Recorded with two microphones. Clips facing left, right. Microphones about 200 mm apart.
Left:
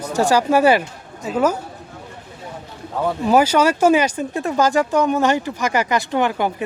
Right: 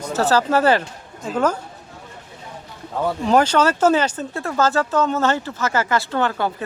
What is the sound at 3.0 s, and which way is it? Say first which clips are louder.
Speech: left 1 dB; 5° left (ahead or behind).